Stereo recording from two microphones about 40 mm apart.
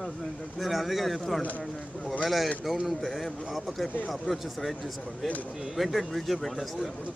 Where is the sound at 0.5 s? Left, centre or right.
Centre.